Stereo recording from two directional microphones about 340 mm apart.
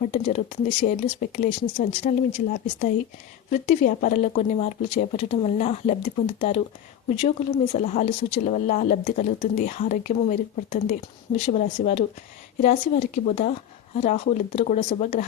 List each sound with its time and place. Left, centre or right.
0.1 s speech: centre
7.2 s speech: centre